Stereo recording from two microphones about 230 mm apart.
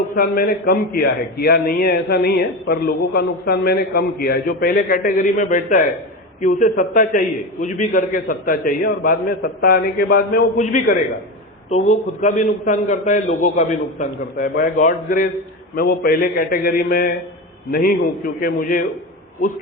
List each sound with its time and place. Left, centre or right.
0.2 s a man's voice: left